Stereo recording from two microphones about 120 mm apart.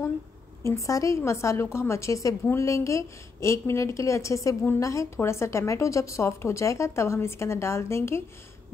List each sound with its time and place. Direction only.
0.7 s a woman's voice: 25° left (ahead or behind)